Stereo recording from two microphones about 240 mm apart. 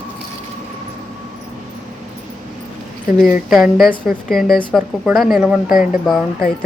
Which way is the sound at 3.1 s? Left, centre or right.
Left.